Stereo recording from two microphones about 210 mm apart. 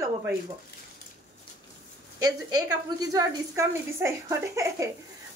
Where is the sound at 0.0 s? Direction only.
10° right (ahead or behind).